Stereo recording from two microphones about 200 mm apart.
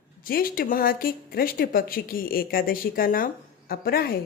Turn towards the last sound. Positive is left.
turn(degrees=50)  # may be behind; listen again after turning